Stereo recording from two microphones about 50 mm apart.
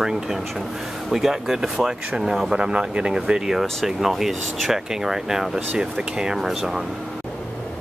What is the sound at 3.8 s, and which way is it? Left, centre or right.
Speech, centre.